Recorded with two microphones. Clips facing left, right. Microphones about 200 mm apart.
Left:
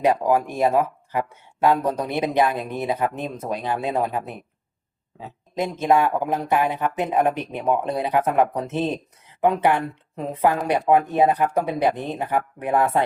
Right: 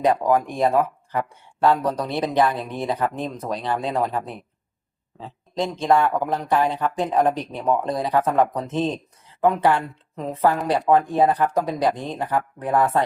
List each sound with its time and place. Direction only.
0.0 s speech: 10° left (ahead or behind)